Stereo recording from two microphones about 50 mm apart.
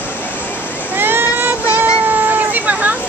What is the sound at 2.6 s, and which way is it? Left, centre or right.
Vehicle, right.